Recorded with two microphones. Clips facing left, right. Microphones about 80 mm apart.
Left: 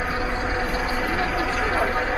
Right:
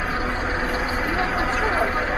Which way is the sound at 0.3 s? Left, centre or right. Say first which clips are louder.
Right 1 dB; right.